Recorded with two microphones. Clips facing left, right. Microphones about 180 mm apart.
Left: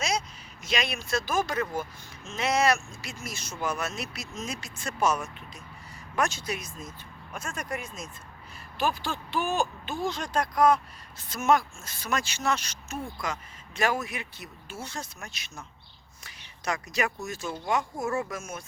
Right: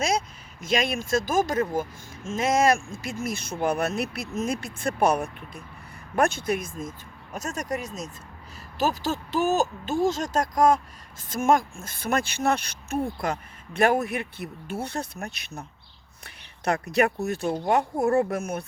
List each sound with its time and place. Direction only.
0.6 s speech: 50° right (ahead or behind)
7.3 s speech: 40° right (ahead or behind); by 18.6 s 60° right (ahead or behind)